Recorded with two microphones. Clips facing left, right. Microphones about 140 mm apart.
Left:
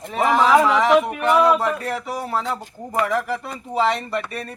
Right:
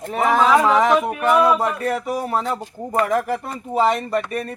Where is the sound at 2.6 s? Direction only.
20° right (ahead or behind).